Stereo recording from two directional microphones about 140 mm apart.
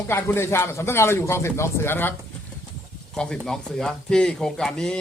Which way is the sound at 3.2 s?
5° left (ahead or behind).